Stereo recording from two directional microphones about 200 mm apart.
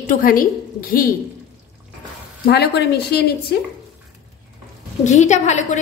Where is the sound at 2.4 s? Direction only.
55° left (ahead or behind).